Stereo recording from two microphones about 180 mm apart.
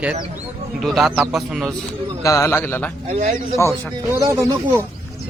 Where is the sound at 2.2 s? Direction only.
15° left (ahead or behind).